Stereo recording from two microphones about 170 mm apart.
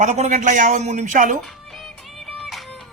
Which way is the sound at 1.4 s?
Centre (ahead or behind).